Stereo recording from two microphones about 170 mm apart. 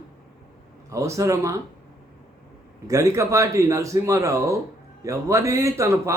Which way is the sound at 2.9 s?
20° right (ahead or behind).